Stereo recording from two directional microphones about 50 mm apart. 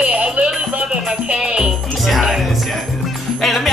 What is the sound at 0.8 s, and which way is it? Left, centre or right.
Music, centre.